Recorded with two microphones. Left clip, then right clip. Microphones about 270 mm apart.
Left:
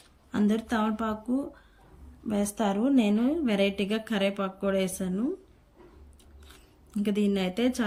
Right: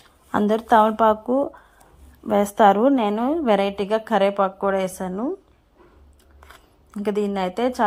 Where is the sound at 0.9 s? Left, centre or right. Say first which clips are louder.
Right 13 dB; right.